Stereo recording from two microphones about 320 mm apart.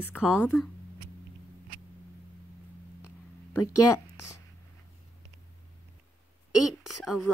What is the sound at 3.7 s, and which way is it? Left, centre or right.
Speech, left.